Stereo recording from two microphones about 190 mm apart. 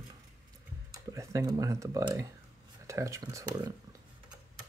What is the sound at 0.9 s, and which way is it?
Speech, 15° right (ahead or behind).